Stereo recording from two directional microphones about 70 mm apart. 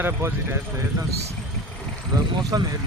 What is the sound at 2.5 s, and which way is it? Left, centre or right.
Speech, right.